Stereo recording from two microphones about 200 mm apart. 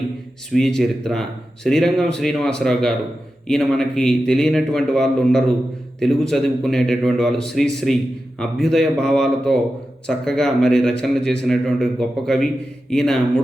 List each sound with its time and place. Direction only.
0.5 s speech: centre (ahead or behind)